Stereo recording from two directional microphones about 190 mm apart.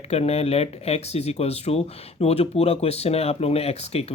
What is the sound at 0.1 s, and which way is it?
Speech, 35° left (ahead or behind).